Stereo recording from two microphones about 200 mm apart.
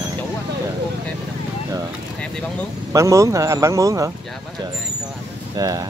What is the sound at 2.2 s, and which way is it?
Speech, 5° left (ahead or behind).